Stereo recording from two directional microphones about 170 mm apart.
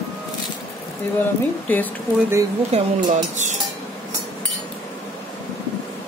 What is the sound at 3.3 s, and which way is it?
Dishes, 45° right (ahead or behind).